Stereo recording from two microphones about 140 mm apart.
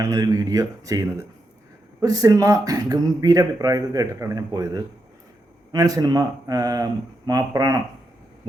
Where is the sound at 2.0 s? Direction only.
25° right (ahead or behind).